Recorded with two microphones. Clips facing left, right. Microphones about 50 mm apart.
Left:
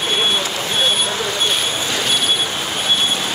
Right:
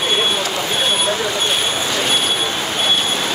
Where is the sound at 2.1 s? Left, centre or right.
Right.